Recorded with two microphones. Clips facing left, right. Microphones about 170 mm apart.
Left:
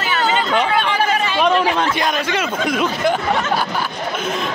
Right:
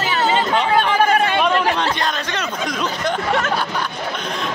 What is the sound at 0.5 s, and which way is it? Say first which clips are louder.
Chatter: right 1 dB; 50° right (ahead or behind).